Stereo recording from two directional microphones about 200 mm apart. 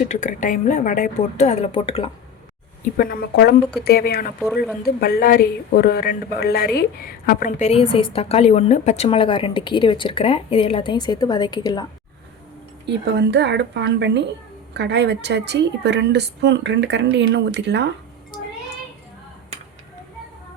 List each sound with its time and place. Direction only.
0.1 s speech: 40° left (ahead or behind)
2.8 s a woman's voice: 45° left (ahead or behind)
4.4 s speech: centre (ahead or behind)
4.9 s a woman's voice: 50° left (ahead or behind); by 11.9 s 20° left (ahead or behind)
12.8 s a woman's voice: 60° right (ahead or behind)